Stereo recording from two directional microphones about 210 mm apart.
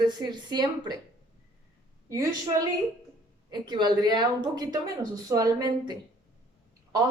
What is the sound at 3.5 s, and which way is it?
A woman's voice, 20° right (ahead or behind).